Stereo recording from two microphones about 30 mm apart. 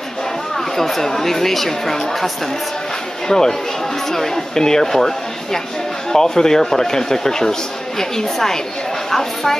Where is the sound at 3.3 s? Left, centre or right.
Centre.